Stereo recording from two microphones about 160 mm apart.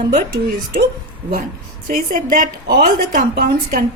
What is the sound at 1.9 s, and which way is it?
A woman's voice, 60° right (ahead or behind).